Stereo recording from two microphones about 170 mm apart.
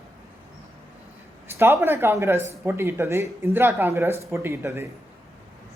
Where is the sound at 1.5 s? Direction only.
15° right (ahead or behind).